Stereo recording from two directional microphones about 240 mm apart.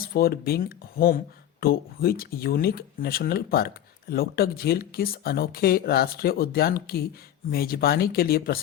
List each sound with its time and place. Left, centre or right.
0.0 s speech: left